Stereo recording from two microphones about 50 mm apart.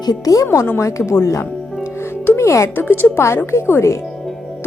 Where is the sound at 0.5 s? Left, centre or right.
Left.